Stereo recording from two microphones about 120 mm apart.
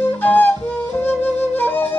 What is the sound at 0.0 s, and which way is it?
Flute, 15° left (ahead or behind).